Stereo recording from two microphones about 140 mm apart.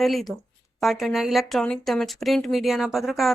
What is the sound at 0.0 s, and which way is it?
Speech, centre (ahead or behind).